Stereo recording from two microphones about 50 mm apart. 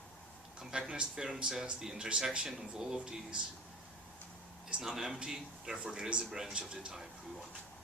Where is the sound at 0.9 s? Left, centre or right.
Right.